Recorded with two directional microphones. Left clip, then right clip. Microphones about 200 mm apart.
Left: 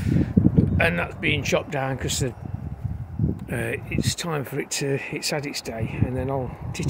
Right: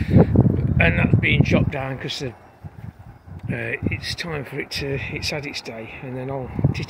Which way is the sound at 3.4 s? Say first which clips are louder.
Right 5 dB; 15° left (ahead or behind).